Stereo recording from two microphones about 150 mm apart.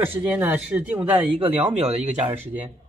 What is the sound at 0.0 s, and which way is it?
Speech, 15° right (ahead or behind).